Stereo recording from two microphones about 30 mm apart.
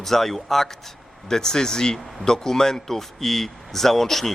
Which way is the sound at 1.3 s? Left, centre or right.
Left.